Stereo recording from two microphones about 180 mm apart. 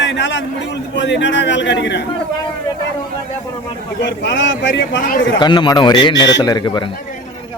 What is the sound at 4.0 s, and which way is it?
A man's voice, 75° left (ahead or behind).